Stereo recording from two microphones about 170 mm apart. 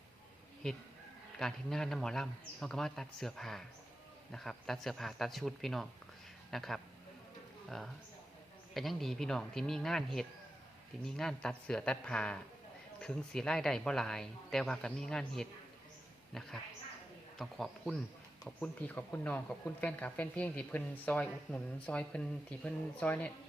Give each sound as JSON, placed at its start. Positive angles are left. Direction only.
{"t": 0.6, "sound": "speech", "side_deg": 5}
{"t": 8.7, "sound": "speech", "side_deg": 0}